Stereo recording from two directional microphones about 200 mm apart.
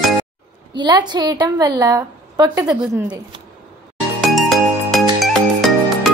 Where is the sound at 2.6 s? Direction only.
5° right (ahead or behind).